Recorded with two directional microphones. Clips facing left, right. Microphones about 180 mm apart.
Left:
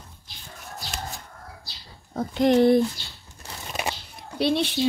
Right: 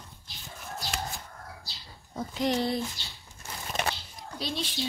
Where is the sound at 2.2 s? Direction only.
55° left (ahead or behind).